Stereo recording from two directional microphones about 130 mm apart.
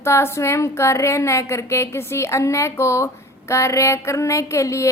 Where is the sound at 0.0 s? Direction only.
20° left (ahead or behind).